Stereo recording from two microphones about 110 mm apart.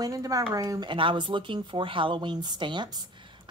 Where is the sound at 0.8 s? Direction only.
50° right (ahead or behind).